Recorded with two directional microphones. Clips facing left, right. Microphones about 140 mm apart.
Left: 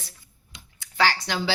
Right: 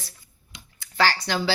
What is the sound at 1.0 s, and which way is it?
Speech, 20° left (ahead or behind).